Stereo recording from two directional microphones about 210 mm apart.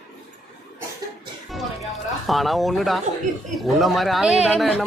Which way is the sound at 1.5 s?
Centre (ahead or behind).